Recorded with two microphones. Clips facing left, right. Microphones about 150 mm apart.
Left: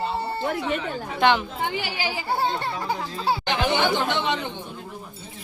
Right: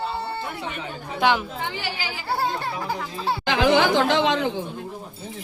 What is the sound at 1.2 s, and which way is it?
A child's voice, 5° right (ahead or behind).